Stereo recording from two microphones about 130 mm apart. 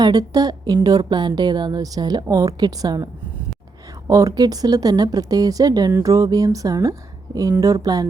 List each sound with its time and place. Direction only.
0.0 s a woman's voice: 30° right (ahead or behind)
4.1 s speech: 25° right (ahead or behind)